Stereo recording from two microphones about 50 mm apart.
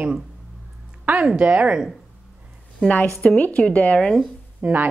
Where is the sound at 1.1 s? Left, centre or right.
Right.